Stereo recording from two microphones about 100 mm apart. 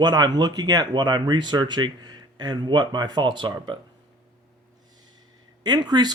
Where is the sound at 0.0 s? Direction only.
45° right (ahead or behind).